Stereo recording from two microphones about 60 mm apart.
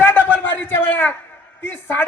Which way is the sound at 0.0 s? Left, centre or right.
Left.